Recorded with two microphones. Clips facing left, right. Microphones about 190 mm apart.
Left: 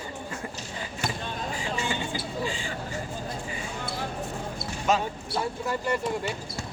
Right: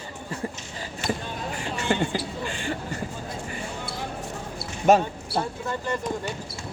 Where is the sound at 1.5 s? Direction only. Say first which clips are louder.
Right 7 dB; 60° right (ahead or behind).